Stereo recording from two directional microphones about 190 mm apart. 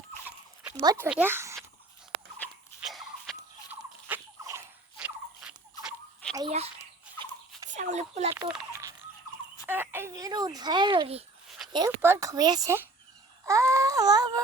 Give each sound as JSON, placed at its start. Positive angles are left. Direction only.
{"t": 0.8, "sound": "speech", "side_deg": -15}
{"t": 2.4, "sound": "a sound", "side_deg": 0}
{"t": 7.7, "sound": "speech", "side_deg": -40}
{"t": 8.3, "sound": "speech", "side_deg": -5}
{"t": 11.4, "sound": "a sound", "side_deg": 0}
{"t": 11.7, "sound": "speech", "side_deg": -15}